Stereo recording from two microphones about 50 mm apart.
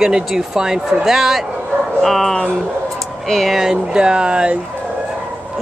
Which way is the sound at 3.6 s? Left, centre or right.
Centre.